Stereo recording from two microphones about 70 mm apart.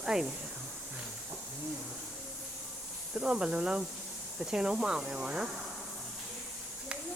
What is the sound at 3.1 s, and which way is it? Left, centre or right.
Speech, centre.